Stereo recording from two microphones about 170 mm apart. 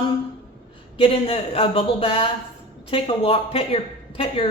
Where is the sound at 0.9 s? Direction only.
35° left (ahead or behind).